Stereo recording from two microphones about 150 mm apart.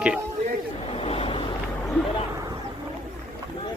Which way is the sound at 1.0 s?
40° left (ahead or behind).